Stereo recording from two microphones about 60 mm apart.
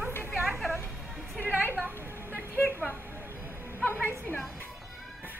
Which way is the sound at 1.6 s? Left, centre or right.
Right.